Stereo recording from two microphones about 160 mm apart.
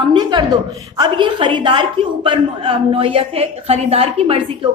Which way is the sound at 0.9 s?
30° right (ahead or behind).